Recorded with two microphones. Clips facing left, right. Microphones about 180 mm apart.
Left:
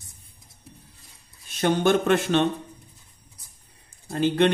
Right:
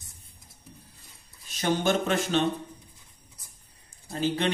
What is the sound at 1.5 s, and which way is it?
Speech, 60° left (ahead or behind).